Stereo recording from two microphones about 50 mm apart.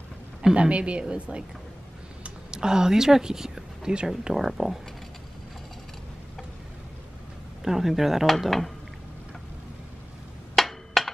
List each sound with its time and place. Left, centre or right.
0.6 s a woman's voice: right; by 4.7 s centre
7.6 s speech: centre
10.5 s a sound: centre